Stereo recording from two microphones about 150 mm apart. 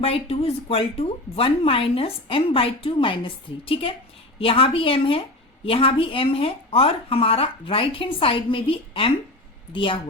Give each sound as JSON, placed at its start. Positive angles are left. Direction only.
{"t": 0.0, "sound": "speech", "side_deg": 40}